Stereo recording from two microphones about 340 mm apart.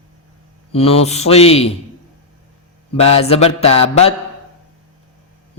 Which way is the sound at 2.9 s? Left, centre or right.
Centre.